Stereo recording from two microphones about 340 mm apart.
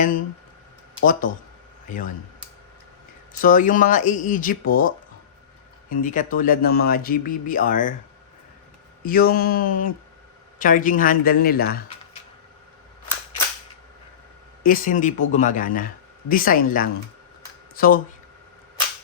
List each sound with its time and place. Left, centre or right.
1.9 s speech: left
3.4 s speech: left
5.9 s speech: left
9.0 s speech: left
14.6 s speech: left